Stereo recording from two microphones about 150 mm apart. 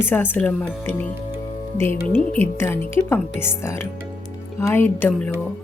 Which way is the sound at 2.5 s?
15° left (ahead or behind).